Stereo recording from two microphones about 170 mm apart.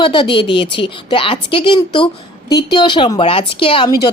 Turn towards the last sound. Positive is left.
turn(degrees=20)  # may be behind; listen again after turning